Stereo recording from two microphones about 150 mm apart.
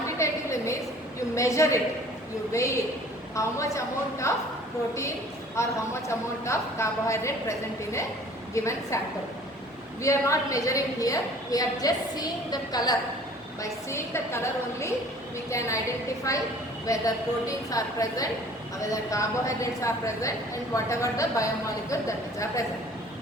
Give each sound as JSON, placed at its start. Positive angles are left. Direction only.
{"t": 0.2, "sound": "a sound", "side_deg": 20}
{"t": 1.4, "sound": "a woman's voice", "side_deg": 20}
{"t": 5.5, "sound": "a woman's voice", "side_deg": 20}
{"t": 8.5, "sound": "a woman's voice", "side_deg": 20}
{"t": 10.0, "sound": "a woman's voice", "side_deg": 20}